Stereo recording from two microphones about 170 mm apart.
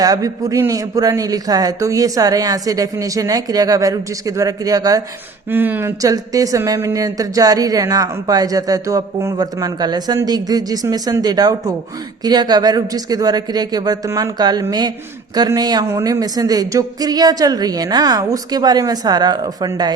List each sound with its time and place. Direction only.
0.0 s speech: 20° right (ahead or behind)